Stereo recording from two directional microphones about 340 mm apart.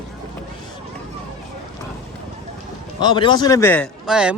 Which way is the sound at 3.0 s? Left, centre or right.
Centre.